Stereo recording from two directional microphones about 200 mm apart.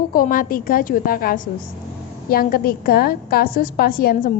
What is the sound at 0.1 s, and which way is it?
A woman's voice, 45° left (ahead or behind).